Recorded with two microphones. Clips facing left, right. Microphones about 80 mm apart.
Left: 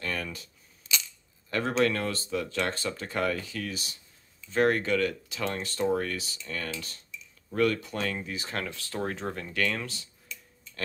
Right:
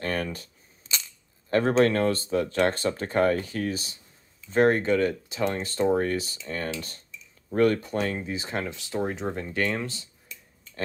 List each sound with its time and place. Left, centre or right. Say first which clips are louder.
0.0 s speech: right 5 dB; right
0.8 s a sound: left 1 dB; right
1.5 s speech: right 5 dB; right
8.0 s speech: right 4 dB; right